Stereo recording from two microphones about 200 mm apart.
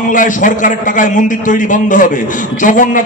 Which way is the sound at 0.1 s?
40° left (ahead or behind).